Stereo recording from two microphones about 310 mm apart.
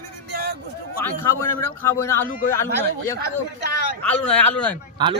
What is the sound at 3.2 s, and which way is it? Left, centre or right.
Speech, right.